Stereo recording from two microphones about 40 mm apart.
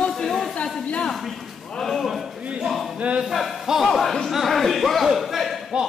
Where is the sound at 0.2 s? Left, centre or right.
Centre.